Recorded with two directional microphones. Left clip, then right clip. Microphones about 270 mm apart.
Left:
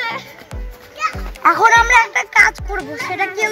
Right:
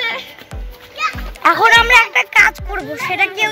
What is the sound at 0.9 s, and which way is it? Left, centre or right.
Music, right.